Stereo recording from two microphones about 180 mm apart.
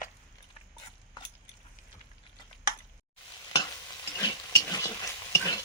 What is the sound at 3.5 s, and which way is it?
Stir, 20° left (ahead or behind).